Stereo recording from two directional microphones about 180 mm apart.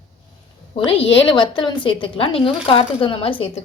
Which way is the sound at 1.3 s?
25° left (ahead or behind).